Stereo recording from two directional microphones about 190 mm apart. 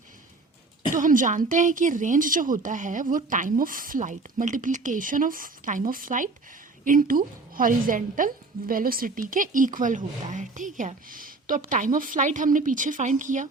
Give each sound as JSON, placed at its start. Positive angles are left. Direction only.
{"t": 0.9, "sound": "a woman's voice", "side_deg": -45}